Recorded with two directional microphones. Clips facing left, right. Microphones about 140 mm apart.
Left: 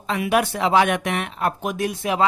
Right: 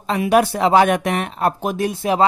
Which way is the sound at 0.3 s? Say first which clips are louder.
Right 5 dB; 40° right (ahead or behind).